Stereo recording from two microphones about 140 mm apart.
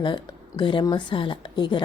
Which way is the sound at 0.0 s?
35° left (ahead or behind).